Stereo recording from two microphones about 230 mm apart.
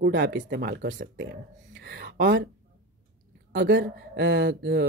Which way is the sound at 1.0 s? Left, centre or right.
Right.